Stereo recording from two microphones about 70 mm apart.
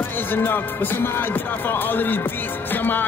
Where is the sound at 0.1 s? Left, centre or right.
Left.